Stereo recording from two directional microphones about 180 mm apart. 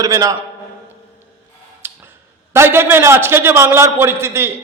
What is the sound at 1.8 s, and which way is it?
Tick-tock, 10° right (ahead or behind).